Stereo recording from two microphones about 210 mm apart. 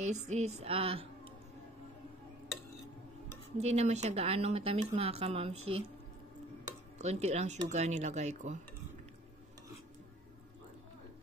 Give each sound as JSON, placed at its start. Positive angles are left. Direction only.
{"t": 0.0, "sound": "speech", "side_deg": -35}
{"t": 3.5, "sound": "a woman's voice", "side_deg": -30}
{"t": 7.0, "sound": "a woman's voice", "side_deg": -30}